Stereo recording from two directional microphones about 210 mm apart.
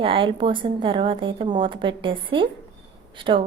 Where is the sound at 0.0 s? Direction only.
25° right (ahead or behind).